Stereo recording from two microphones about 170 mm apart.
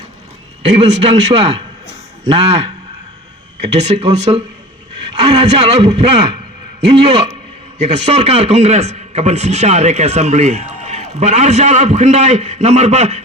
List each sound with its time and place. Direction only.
0.7 s a man's voice: 40° right (ahead or behind)
3.8 s a man's voice: 40° right (ahead or behind)
5.6 s a man's voice: 40° right (ahead or behind)